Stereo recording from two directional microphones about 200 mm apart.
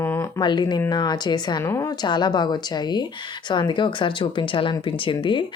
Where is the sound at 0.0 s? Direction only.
15° left (ahead or behind).